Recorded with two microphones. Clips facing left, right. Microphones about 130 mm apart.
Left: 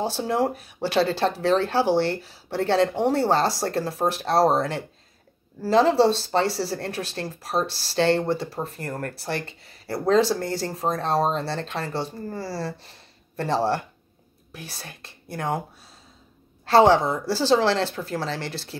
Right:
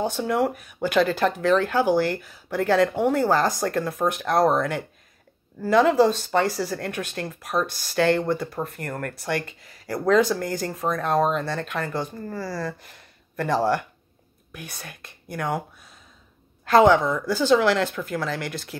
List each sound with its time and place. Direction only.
0.0 s speech: 30° left (ahead or behind)